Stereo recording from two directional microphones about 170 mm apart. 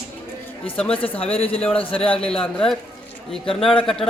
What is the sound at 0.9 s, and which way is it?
Speech, 35° left (ahead or behind).